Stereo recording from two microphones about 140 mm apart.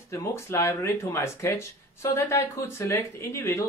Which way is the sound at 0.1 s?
20° left (ahead or behind).